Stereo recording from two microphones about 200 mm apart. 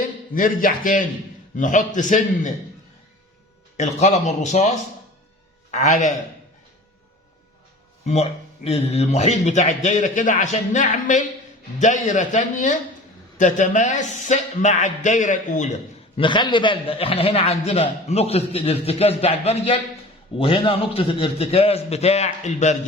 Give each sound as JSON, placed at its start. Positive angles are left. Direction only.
{"t": 0.3, "sound": "speech", "side_deg": 40}
{"t": 3.8, "sound": "speech", "side_deg": 35}
{"t": 8.0, "sound": "speech", "side_deg": 30}
{"t": 16.2, "sound": "a man's voice", "side_deg": 25}